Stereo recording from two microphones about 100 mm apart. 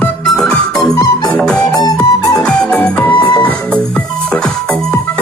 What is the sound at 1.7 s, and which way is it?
Music, 35° left (ahead or behind).